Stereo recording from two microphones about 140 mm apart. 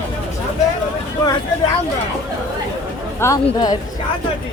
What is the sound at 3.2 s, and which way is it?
Speech, 20° left (ahead or behind).